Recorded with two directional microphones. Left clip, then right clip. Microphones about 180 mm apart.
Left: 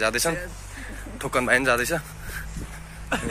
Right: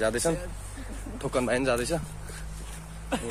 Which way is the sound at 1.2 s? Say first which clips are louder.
Left 6 dB; centre (ahead or behind).